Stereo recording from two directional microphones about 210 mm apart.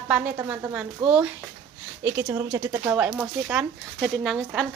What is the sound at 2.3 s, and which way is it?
Speech, 15° right (ahead or behind).